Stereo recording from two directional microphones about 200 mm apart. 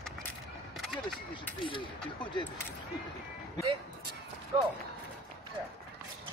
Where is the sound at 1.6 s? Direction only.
25° left (ahead or behind).